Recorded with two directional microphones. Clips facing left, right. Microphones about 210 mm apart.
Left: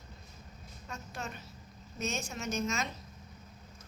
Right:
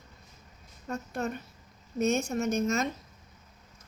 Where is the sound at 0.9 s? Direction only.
60° right (ahead or behind).